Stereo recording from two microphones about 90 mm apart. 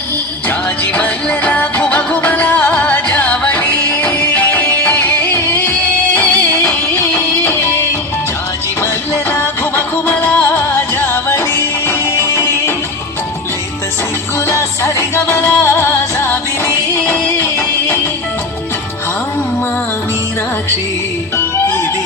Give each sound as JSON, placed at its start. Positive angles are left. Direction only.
{"t": 0.9, "sound": "music", "side_deg": 20}
{"t": 6.7, "sound": "music", "side_deg": 30}
{"t": 8.8, "sound": "music", "side_deg": 35}
{"t": 10.2, "sound": "music", "side_deg": 20}
{"t": 14.3, "sound": "music", "side_deg": 35}
{"t": 21.3, "sound": "music", "side_deg": 25}